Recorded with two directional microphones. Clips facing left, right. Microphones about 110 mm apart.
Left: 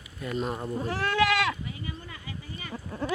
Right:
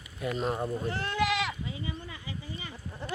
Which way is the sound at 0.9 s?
90° left.